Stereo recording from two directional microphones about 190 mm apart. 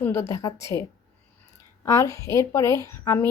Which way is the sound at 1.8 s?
15° left (ahead or behind).